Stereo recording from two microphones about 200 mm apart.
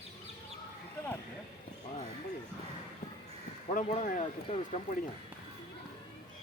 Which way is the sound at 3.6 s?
35° left (ahead or behind).